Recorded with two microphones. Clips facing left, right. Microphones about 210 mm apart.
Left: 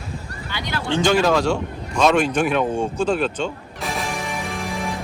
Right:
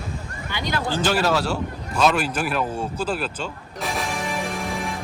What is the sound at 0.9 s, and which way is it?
Speech, 5° right (ahead or behind).